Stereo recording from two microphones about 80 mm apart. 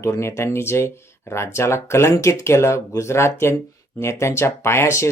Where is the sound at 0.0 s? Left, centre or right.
Left.